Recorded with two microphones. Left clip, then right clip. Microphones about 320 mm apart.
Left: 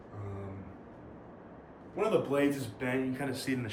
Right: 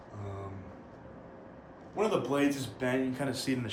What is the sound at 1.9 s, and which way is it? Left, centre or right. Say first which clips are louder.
Speech: even; centre.